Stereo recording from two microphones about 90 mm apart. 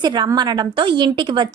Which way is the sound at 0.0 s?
55° right (ahead or behind).